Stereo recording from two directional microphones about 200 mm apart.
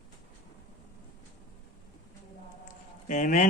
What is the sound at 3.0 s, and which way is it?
Speech, 40° left (ahead or behind).